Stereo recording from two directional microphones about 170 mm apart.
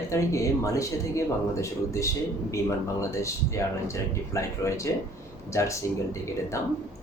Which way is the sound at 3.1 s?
15° left (ahead or behind).